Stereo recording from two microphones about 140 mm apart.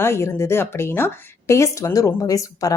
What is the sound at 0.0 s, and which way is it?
A woman's voice, 20° left (ahead or behind).